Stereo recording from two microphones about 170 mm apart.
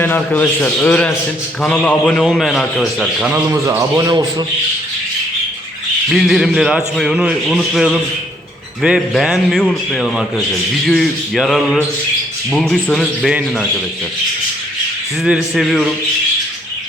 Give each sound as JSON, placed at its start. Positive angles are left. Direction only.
{"t": 0.0, "sound": "a man's voice", "side_deg": 10}
{"t": 6.1, "sound": "a man's voice", "side_deg": 0}
{"t": 15.2, "sound": "a man's voice", "side_deg": 0}